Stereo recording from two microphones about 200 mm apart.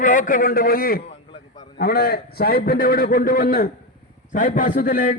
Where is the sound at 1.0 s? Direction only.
25° left (ahead or behind).